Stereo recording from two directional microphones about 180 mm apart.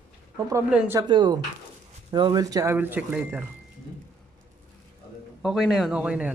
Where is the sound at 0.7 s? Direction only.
10° right (ahead or behind).